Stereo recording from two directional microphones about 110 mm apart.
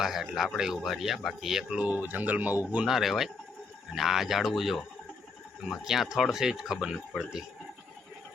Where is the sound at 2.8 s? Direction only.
Centre (ahead or behind).